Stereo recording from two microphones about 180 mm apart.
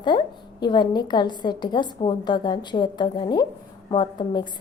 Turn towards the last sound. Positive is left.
turn(degrees=25)  # may be behind; listen again after turning